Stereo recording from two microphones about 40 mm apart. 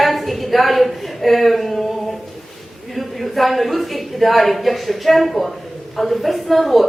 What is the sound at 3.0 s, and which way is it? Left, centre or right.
A woman's voice, centre.